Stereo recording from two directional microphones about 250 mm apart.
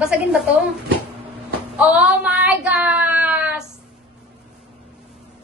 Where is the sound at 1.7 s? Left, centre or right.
Centre.